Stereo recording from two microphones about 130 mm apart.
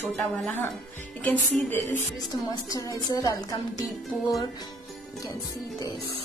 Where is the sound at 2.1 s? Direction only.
30° left (ahead or behind).